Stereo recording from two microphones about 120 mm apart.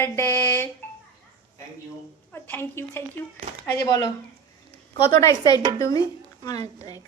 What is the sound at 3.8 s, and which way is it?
Speech, 30° left (ahead or behind).